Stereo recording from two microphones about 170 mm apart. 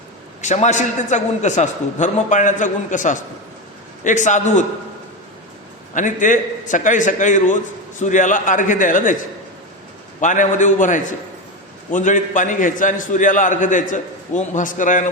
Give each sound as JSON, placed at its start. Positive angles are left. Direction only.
{"t": 0.4, "sound": "a man's voice", "side_deg": 45}
{"t": 5.9, "sound": "a man's voice", "side_deg": 50}
{"t": 10.2, "sound": "a man's voice", "side_deg": 45}